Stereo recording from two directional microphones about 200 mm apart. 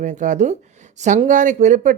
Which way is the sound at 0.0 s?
40° right (ahead or behind).